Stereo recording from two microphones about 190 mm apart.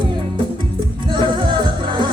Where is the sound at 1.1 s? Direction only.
25° right (ahead or behind).